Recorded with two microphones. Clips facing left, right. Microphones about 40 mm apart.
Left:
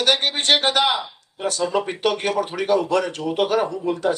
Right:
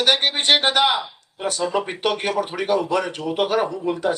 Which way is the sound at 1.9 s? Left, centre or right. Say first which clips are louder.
Left 1 dB; centre.